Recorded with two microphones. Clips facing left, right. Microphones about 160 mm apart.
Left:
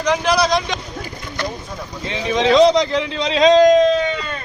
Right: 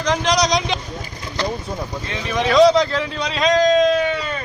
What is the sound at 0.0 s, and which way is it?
Vehicle, 10° left (ahead or behind).